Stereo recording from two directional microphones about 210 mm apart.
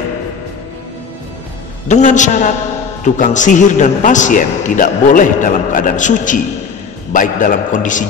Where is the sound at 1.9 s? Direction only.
35° left (ahead or behind).